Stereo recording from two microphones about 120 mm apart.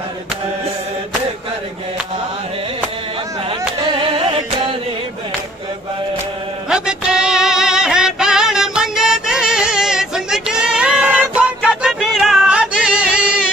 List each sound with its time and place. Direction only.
3.4 s music: 45° right (ahead or behind)
6.7 s music: 5° right (ahead or behind)